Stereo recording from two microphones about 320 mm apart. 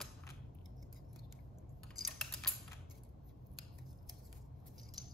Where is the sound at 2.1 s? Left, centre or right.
Centre.